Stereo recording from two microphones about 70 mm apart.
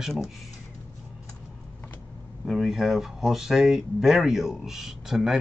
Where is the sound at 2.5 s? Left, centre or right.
Centre.